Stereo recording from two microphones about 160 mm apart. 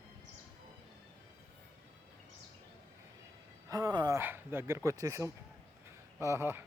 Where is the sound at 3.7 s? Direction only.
25° right (ahead or behind).